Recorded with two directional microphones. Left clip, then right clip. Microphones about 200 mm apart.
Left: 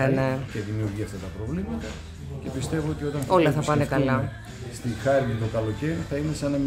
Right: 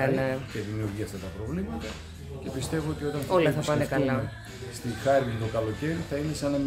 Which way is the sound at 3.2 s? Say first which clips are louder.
Left 3 dB; 20° left (ahead or behind).